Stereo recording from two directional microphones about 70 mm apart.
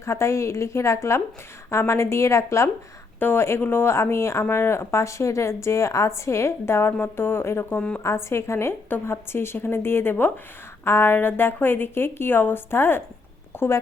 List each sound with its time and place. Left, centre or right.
0.0 s a woman's voice: left
3.2 s speech: left
7.8 s a woman's voice: centre
8.0 s speech: left
13.5 s a sound: left